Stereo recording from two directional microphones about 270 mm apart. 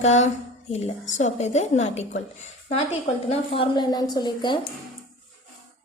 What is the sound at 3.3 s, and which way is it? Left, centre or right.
A woman's voice, left.